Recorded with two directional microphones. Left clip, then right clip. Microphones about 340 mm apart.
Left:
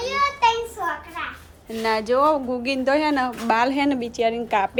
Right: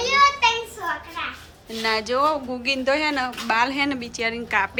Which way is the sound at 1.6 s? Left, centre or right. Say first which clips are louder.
Left 2 dB; centre.